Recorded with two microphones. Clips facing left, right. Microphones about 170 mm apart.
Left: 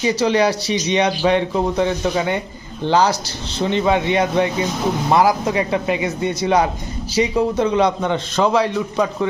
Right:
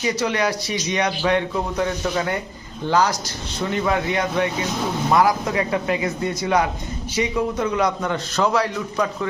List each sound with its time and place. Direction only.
0.0 s a man's voice: 30° left (ahead or behind)